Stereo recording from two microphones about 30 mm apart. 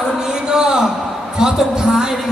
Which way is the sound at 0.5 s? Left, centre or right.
Right.